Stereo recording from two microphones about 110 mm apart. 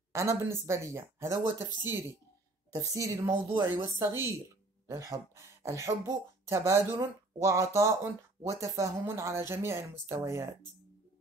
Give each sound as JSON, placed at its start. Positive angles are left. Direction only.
{"t": 0.1, "sound": "speech", "side_deg": -25}
{"t": 2.7, "sound": "a woman's voice", "side_deg": -30}